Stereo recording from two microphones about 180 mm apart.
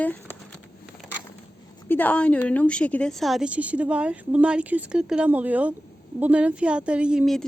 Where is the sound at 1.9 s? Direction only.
10° left (ahead or behind).